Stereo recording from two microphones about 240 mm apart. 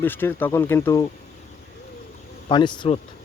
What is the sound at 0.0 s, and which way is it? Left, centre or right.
Speech, centre.